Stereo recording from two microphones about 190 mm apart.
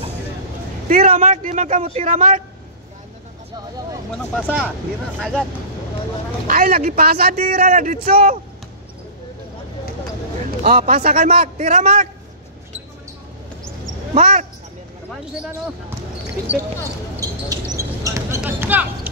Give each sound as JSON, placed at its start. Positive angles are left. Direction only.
{"t": 0.8, "sound": "speech", "side_deg": -45}
{"t": 4.4, "sound": "speech", "side_deg": 0}
{"t": 6.4, "sound": "speech", "side_deg": -50}
{"t": 10.6, "sound": "a man's voice", "side_deg": -50}
{"t": 16.5, "sound": "speech", "side_deg": -10}
{"t": 17.2, "sound": "basketball bounce", "side_deg": -20}